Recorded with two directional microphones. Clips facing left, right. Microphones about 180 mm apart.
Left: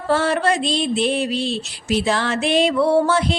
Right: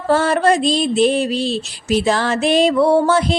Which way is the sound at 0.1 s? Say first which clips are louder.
Right 4 dB; 40° right (ahead or behind).